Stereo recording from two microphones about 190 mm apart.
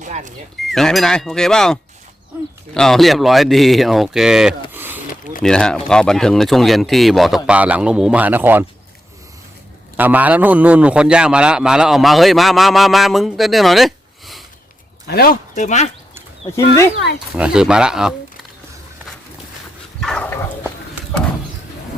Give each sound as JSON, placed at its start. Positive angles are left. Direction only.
{"t": 0.0, "sound": "a sound", "side_deg": -40}
{"t": 0.6, "sound": "a man's voice", "side_deg": 0}
{"t": 4.7, "sound": "mechanisms", "side_deg": -10}
{"t": 5.4, "sound": "a man's voice", "side_deg": 5}
{"t": 10.0, "sound": "a man's voice", "side_deg": -10}
{"t": 15.0, "sound": "speech", "side_deg": 50}
{"t": 17.3, "sound": "a man's voice", "side_deg": -5}
{"t": 20.0, "sound": "dog", "side_deg": 5}